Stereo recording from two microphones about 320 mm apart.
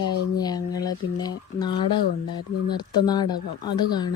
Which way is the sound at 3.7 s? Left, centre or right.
Centre.